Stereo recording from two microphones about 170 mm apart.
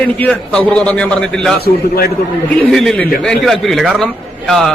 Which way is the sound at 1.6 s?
65° left (ahead or behind).